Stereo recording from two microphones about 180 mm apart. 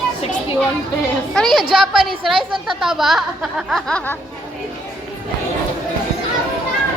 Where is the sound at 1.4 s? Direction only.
5° left (ahead or behind).